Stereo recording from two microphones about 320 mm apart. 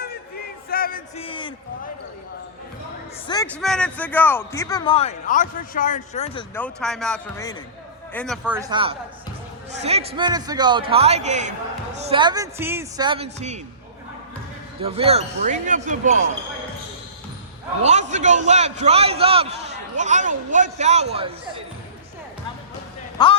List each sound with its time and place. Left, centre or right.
0.7 s a sound: left
3.2 s a man's voice: centre
3.5 s a man's voice: centre
6.5 s a man's voice: centre
14.8 s speech: centre
17.8 s a man's voice: right
23.1 s music: centre